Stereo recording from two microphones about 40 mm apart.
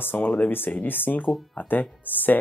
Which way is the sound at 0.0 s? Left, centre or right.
Left.